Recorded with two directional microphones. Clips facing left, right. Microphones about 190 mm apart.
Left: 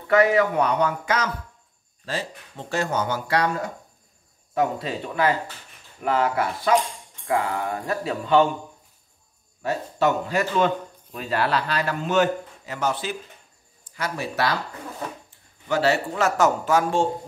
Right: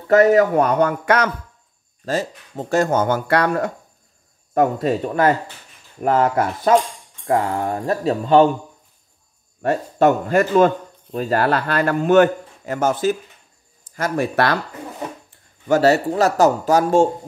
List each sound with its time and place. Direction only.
0.1 s speech: 45° right (ahead or behind); by 1.3 s 60° right (ahead or behind)
2.0 s speech: 45° right (ahead or behind); by 3.7 s 60° right (ahead or behind)
4.6 s speech: 50° right (ahead or behind)
9.6 s a man's voice: 55° right (ahead or behind)
15.7 s speech: 40° right (ahead or behind)